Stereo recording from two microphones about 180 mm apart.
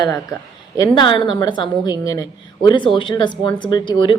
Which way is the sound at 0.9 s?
25° left (ahead or behind).